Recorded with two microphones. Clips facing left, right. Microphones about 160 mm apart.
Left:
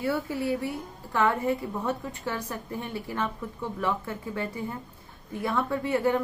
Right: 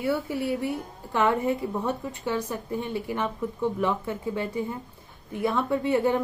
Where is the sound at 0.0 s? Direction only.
15° right (ahead or behind).